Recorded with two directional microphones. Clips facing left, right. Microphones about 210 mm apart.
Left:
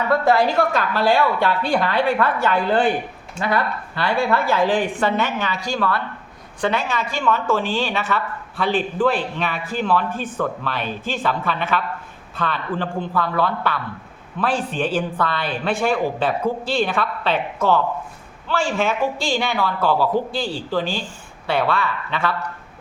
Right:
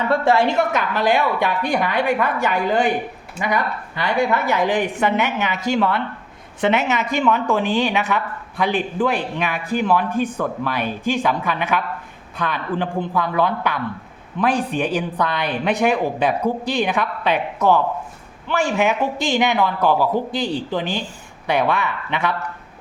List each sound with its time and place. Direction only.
0.1 s a woman's voice: 25° right (ahead or behind)